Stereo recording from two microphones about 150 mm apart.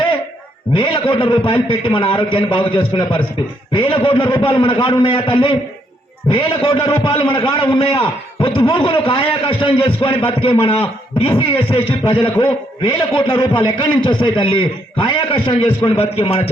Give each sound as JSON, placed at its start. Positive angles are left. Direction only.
{"t": 0.7, "sound": "a man's voice", "side_deg": 35}